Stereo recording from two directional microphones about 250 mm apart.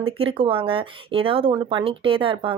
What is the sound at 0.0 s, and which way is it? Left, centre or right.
Speech, right.